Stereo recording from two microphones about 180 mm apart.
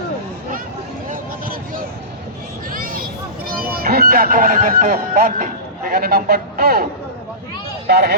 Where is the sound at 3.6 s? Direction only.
55° right (ahead or behind).